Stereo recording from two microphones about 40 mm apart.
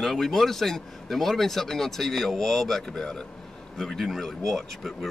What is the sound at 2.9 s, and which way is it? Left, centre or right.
Speech, left.